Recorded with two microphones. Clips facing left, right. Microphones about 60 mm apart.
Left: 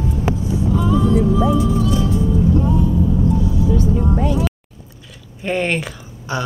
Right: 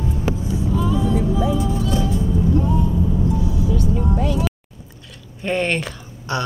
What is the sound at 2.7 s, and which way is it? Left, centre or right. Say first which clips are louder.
Vehicle: left 3 dB; centre.